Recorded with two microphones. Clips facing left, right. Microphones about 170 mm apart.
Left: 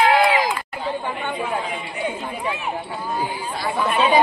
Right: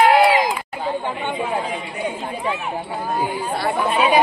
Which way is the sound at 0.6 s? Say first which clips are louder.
Right 2 dB; 15° right (ahead or behind).